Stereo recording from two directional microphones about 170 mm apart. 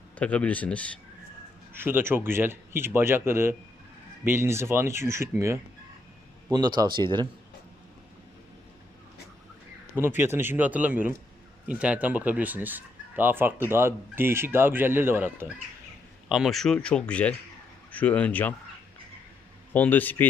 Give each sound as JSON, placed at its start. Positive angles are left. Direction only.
{"t": 0.2, "sound": "speech", "side_deg": 10}
{"t": 1.7, "sound": "speech", "side_deg": -10}
{"t": 9.9, "sound": "speech", "side_deg": -10}
{"t": 16.3, "sound": "speech", "side_deg": 0}
{"t": 19.7, "sound": "speech", "side_deg": 10}